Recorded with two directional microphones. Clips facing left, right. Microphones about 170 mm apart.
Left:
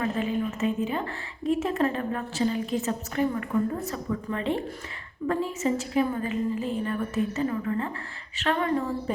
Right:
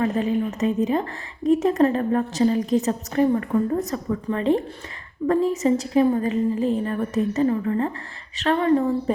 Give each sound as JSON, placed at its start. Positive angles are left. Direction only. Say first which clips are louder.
{"t": 0.0, "sound": "a woman's voice", "louder": "right 5 dB", "side_deg": -35}